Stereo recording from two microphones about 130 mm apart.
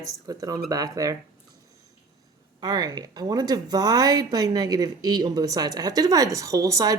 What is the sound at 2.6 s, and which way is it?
Speech, 30° right (ahead or behind).